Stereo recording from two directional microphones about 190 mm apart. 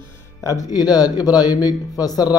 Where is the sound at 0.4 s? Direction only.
15° left (ahead or behind).